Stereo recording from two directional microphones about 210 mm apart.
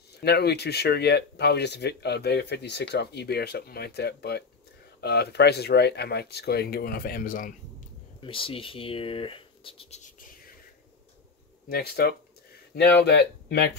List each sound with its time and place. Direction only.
0.2 s speech: 50° left (ahead or behind)
8.2 s speech: 25° left (ahead or behind)
11.7 s speech: 45° left (ahead or behind)